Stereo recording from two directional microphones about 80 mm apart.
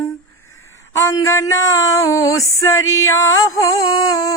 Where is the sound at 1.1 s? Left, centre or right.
Left.